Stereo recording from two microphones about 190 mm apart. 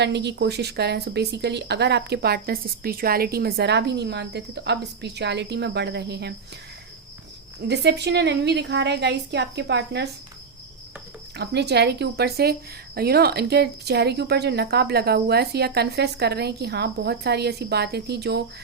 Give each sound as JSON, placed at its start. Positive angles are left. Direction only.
{"t": 0.0, "sound": "a woman's voice", "side_deg": -65}
{"t": 7.7, "sound": "a woman's voice", "side_deg": -60}
{"t": 11.3, "sound": "a woman's voice", "side_deg": -60}